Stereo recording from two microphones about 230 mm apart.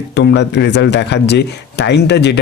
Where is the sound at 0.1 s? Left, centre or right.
Left.